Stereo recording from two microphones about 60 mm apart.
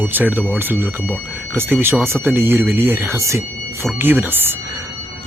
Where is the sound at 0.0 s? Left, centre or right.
Right.